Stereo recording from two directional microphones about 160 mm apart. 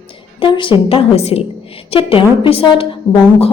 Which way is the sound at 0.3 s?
35° left (ahead or behind).